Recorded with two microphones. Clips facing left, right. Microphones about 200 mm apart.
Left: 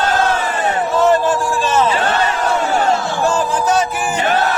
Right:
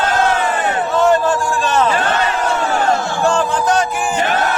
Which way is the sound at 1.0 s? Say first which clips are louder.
Even; centre (ahead or behind).